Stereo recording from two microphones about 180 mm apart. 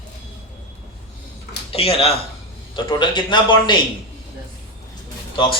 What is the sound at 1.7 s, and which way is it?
A man's voice, 35° left (ahead or behind).